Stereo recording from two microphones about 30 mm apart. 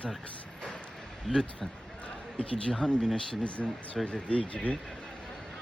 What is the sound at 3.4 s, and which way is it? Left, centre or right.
Speech, left.